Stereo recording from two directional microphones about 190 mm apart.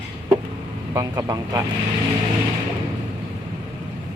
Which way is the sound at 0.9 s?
15° right (ahead or behind).